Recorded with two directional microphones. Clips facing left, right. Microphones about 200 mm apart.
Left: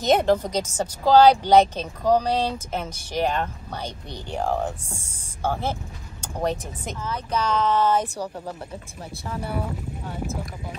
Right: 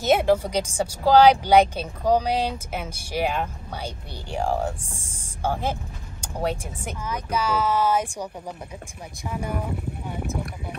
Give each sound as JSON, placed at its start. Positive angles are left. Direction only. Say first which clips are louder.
{"t": 0.0, "sound": "a woman's voice", "louder": "even", "side_deg": -5}